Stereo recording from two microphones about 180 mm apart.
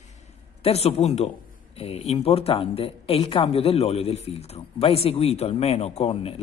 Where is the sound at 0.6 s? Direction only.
35° left (ahead or behind).